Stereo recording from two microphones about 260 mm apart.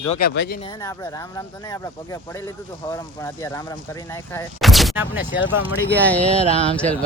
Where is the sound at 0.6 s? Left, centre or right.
Centre.